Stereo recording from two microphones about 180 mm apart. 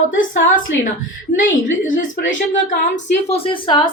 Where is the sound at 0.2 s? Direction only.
90° left.